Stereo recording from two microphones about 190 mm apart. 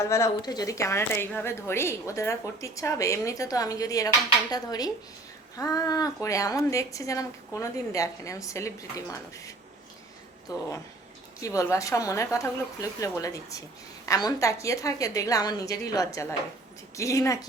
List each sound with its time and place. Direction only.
0.0 s a woman's voice: 15° left (ahead or behind)
4.5 s a sound: 20° left (ahead or behind)
6.2 s a woman's voice: 15° left (ahead or behind)
11.3 s a woman's voice: 15° left (ahead or behind)